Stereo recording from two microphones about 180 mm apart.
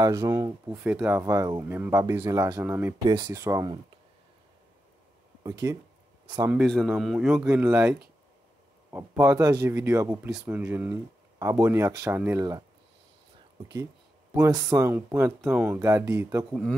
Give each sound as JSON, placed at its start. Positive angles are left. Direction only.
{"t": 0.0, "sound": "speech", "side_deg": -15}
{"t": 3.1, "sound": "speech", "side_deg": -25}
{"t": 5.4, "sound": "a man's voice", "side_deg": -20}
{"t": 6.5, "sound": "a man's voice", "side_deg": 0}
{"t": 7.4, "sound": "speech", "side_deg": -15}
{"t": 8.9, "sound": "speech", "side_deg": -15}
{"t": 14.4, "sound": "speech", "side_deg": -20}